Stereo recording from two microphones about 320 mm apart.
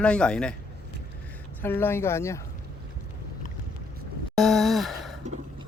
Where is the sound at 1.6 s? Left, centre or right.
Centre.